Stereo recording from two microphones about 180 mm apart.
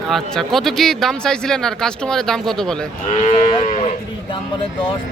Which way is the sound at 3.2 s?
30° left (ahead or behind).